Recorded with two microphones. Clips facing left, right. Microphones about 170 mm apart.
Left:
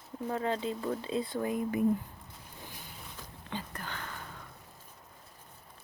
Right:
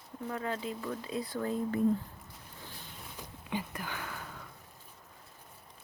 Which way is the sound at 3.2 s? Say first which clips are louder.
Right 4 dB; 15° right (ahead or behind).